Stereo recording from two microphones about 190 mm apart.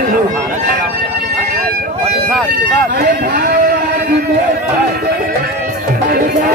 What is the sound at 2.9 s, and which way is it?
Speech, 55° right (ahead or behind).